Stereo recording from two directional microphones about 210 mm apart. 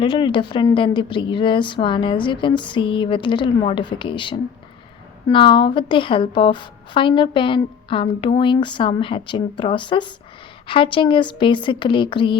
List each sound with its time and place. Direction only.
0.0 s a woman's voice: 25° left (ahead or behind)